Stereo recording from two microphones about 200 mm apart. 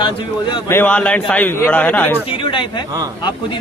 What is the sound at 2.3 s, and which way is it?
Speech, 25° left (ahead or behind).